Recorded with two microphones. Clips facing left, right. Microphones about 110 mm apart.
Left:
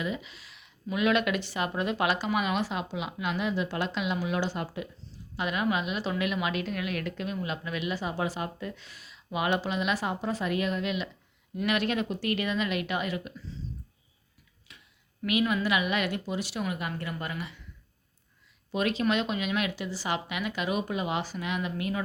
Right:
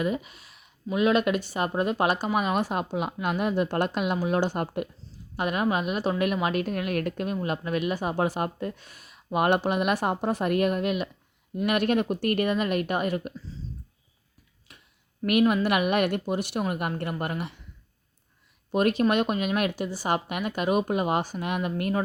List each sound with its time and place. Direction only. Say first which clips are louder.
0.0 s speech: right 6 dB; 50° right (ahead or behind)
14.7 s a sound: right 1 dB; 50° right (ahead or behind)
15.3 s a woman's voice: right 5 dB; 55° right (ahead or behind)
18.7 s speech: right 5 dB; 50° right (ahead or behind)